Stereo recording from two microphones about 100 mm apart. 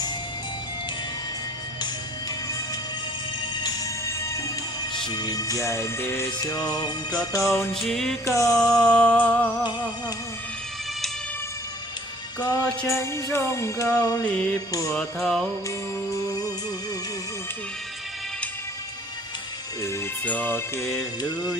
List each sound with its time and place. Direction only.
3.5 s music: 45° left (ahead or behind)
4.0 s music: 30° left (ahead or behind)
4.9 s music: 45° left (ahead or behind)
7.3 s music: 30° left (ahead or behind)
7.9 s music: centre (ahead or behind)
8.2 s music: 30° left (ahead or behind)
8.7 s music: 10° left (ahead or behind)
12.4 s music: 40° left (ahead or behind)
12.9 s music: 30° left (ahead or behind)
14.3 s music: 10° left (ahead or behind)
14.7 s music: 35° left (ahead or behind)
14.9 s music: centre (ahead or behind)
20.2 s music: 15° left (ahead or behind)
21.2 s music: 40° left (ahead or behind)